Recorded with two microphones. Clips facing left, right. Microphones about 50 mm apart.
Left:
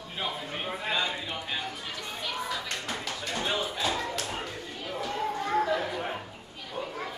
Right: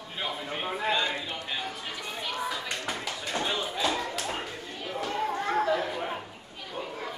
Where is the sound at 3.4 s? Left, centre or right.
Centre.